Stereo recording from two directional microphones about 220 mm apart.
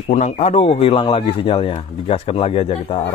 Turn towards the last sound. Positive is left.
turn(degrees=25)  # may be behind; listen again after turning